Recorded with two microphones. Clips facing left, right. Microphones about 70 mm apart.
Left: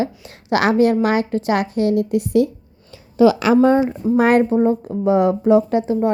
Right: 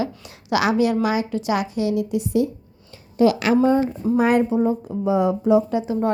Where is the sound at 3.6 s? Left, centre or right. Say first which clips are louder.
Left 4 dB; left.